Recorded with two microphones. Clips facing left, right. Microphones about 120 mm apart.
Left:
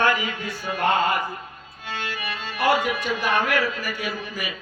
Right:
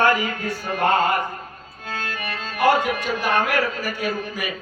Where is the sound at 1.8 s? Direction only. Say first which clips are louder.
Right 1 dB; 45° right (ahead or behind).